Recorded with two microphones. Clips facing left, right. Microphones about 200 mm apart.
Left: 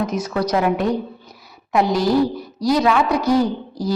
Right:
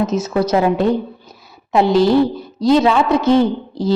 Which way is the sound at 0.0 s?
25° right (ahead or behind).